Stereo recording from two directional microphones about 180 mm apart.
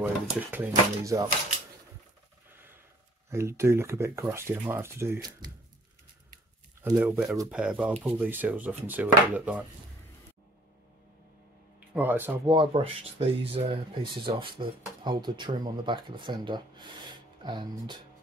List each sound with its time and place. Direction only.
0.0 s speech: 10° right (ahead or behind)
3.3 s speech: 15° right (ahead or behind)
7.0 s speech: 5° right (ahead or behind)
11.9 s speech: 10° right (ahead or behind)
12.4 s speech: 30° right (ahead or behind)